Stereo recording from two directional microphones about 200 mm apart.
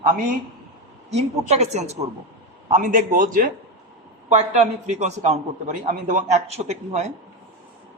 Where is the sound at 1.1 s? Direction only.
35° right (ahead or behind).